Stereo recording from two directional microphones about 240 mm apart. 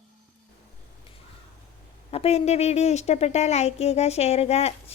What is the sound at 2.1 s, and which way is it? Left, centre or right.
Speech, left.